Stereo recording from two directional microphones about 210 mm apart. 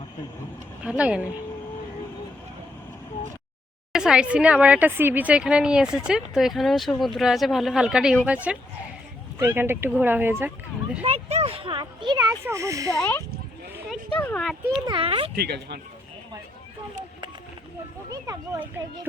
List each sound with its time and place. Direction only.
0.8 s a woman's voice: 5° right (ahead or behind)
3.9 s a woman's voice: 5° right (ahead or behind)
11.0 s speech: 30° right (ahead or behind)
12.9 s speech: 10° left (ahead or behind)
14.2 s a woman's voice: 5° left (ahead or behind)
14.8 s speech: 25° right (ahead or behind)
15.4 s speech: 50° right (ahead or behind)
18.1 s speech: 10° right (ahead or behind)